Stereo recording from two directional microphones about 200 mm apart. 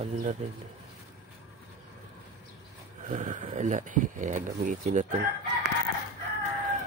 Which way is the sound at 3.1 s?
40° right (ahead or behind).